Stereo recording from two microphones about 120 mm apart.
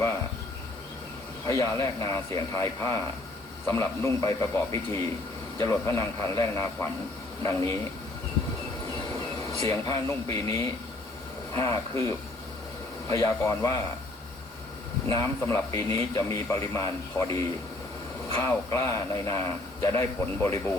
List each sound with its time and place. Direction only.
1.5 s a man's voice: 25° left (ahead or behind)
9.6 s a man's voice: 25° left (ahead or behind)
15.0 s a man's voice: 25° left (ahead or behind)